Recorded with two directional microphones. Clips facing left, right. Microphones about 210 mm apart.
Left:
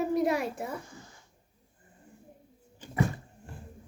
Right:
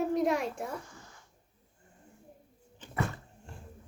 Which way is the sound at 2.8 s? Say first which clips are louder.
Left 5 dB; 15° left (ahead or behind).